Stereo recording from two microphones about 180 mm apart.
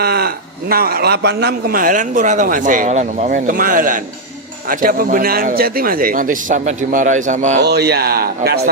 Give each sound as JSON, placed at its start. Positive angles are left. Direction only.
{"t": 0.0, "sound": "a sound", "side_deg": -60}
{"t": 0.7, "sound": "a man's voice", "side_deg": -55}
{"t": 7.6, "sound": "speech", "side_deg": -65}